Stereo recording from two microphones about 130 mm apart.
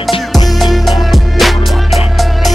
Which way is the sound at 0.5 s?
Centre (ahead or behind).